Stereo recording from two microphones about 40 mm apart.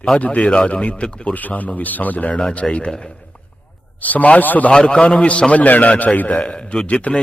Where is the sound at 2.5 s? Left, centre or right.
Left.